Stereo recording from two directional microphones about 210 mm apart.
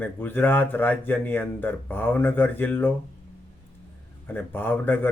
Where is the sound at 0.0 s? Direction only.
10° left (ahead or behind).